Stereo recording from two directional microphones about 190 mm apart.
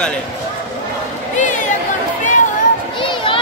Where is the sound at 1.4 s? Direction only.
40° left (ahead or behind).